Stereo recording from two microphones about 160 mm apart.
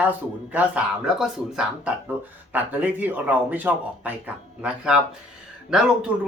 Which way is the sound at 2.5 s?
10° right (ahead or behind).